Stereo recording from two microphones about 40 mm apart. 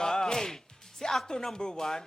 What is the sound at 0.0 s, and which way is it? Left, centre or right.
Music, centre.